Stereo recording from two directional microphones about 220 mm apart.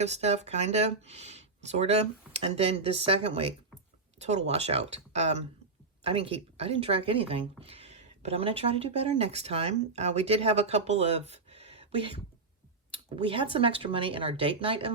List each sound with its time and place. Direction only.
0.0 s speech: 30° right (ahead or behind)